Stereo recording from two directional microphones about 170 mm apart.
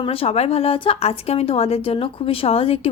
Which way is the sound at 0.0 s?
35° left (ahead or behind).